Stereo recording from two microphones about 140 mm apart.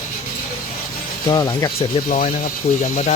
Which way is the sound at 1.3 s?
30° left (ahead or behind).